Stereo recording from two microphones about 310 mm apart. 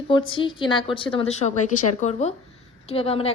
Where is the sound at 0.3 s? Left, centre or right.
Centre.